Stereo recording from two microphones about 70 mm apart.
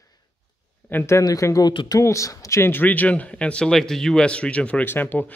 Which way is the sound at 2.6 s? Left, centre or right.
Left.